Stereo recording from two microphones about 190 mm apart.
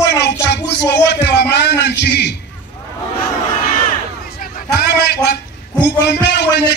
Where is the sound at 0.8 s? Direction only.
60° left (ahead or behind).